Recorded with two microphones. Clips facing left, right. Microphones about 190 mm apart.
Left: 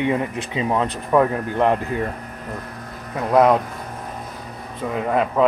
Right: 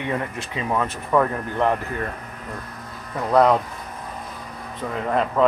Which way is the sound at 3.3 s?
10° left (ahead or behind).